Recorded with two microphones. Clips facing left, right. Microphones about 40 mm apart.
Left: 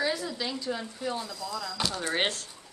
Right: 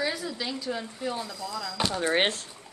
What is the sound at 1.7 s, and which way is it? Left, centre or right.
Speech, right.